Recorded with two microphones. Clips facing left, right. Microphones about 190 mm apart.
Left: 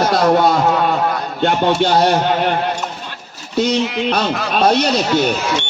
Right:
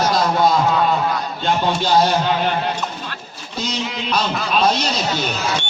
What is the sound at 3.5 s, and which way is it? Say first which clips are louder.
Speech: left 9 dB; 65° left (ahead or behind).